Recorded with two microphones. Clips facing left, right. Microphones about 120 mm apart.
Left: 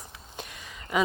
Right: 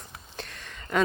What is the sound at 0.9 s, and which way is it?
Speech, 10° left (ahead or behind).